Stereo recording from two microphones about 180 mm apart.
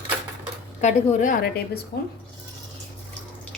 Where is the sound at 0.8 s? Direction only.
40° left (ahead or behind).